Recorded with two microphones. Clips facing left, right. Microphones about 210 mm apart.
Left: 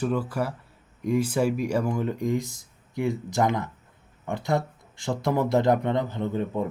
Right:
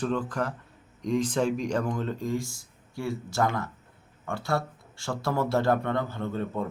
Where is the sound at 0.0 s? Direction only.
10° left (ahead or behind).